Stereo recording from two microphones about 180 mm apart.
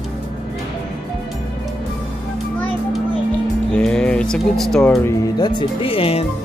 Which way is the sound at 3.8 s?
5° left (ahead or behind).